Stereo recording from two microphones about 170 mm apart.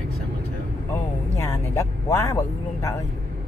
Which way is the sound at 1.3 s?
20° left (ahead or behind).